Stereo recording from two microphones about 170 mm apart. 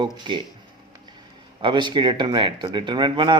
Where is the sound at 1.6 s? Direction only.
25° right (ahead or behind).